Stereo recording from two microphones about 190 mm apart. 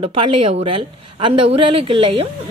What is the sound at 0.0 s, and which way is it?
A woman's voice, 30° right (ahead or behind).